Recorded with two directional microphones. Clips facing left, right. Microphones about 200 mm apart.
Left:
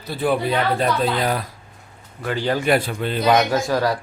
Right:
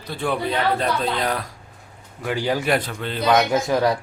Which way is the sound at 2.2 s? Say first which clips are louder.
Left 1 dB; 10° right (ahead or behind).